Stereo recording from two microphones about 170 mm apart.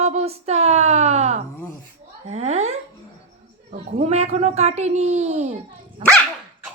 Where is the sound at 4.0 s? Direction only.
40° right (ahead or behind).